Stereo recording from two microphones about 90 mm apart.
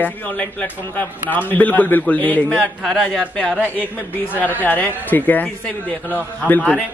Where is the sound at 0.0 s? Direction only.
20° left (ahead or behind).